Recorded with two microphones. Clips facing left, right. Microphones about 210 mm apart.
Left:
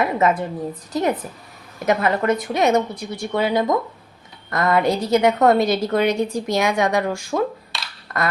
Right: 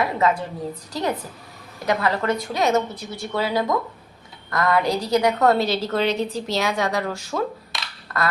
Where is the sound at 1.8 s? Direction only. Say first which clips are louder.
Left 3 dB; 20° left (ahead or behind).